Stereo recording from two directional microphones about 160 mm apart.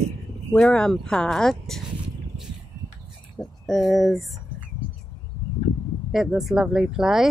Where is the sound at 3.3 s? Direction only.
5° left (ahead or behind).